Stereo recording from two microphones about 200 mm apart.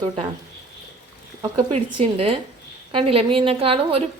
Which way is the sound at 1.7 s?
30° right (ahead or behind).